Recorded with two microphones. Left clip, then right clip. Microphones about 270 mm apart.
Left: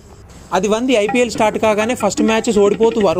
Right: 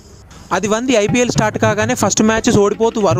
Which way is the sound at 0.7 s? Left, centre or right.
Right.